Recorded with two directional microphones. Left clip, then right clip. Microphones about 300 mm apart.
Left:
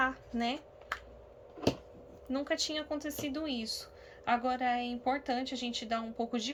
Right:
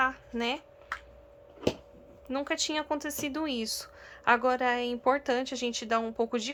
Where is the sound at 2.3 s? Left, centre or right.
Centre.